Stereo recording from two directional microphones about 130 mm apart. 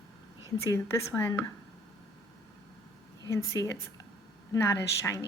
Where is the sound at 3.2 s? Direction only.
25° left (ahead or behind).